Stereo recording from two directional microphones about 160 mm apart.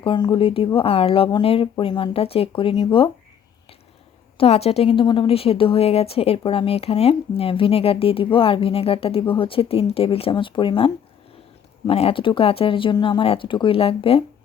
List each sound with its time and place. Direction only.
0.0 s a woman's voice: 30° left (ahead or behind)
4.4 s a woman's voice: 40° left (ahead or behind)